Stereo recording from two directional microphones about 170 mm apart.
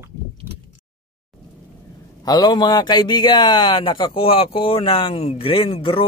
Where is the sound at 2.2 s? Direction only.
25° left (ahead or behind).